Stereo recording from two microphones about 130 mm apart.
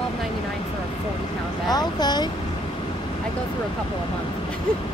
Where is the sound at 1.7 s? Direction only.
30° left (ahead or behind).